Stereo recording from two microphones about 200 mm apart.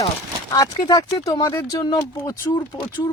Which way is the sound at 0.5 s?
20° left (ahead or behind).